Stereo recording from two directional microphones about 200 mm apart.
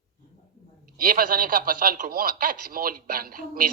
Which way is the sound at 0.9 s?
45° right (ahead or behind).